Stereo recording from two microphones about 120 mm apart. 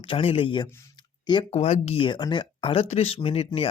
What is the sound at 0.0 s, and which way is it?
Speech, 50° left (ahead or behind).